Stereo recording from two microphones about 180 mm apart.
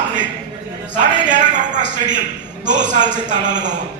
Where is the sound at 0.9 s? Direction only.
45° right (ahead or behind).